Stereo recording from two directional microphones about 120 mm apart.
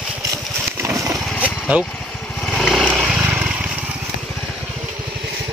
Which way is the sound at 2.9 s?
10° right (ahead or behind).